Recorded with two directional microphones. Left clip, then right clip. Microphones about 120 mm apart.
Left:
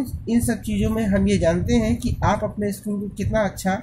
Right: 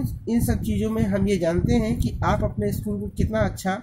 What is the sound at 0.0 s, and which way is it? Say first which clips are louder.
A woman's voice: left 2 dB; 40° right (ahead or behind).